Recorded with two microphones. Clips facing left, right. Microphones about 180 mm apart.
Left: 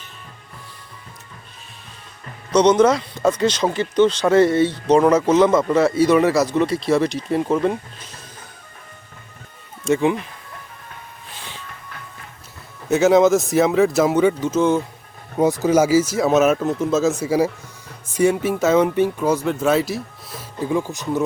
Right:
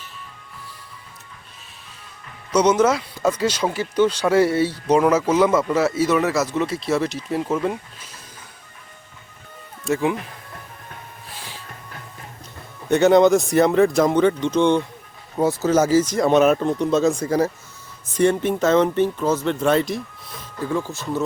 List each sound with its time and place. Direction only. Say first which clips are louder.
2.5 s speech: left 3 dB; 10° right (ahead or behind)
9.8 s speech: left 3 dB; centre (ahead or behind)
11.3 s music: left 1 dB; 5° right (ahead or behind)
12.9 s speech: even; centre (ahead or behind)
15.4 s speech: left 2 dB; 15° left (ahead or behind)
20.4 s speech: left 3 dB; 15° left (ahead or behind)